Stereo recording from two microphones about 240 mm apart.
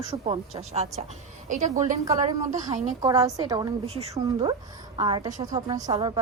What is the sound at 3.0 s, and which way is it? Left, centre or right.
A woman's voice, centre.